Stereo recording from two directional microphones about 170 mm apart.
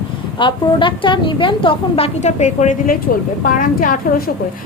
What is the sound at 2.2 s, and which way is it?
A woman's voice, 45° left (ahead or behind).